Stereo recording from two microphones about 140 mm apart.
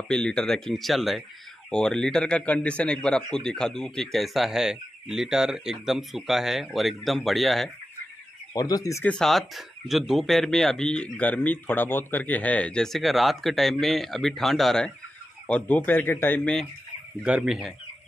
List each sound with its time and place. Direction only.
0.1 s a man's voice: 5° left (ahead or behind)
8.5 s speech: 25° left (ahead or behind)
9.0 s a man's voice: 5° left (ahead or behind)
17.2 s a man's voice: 5° right (ahead or behind)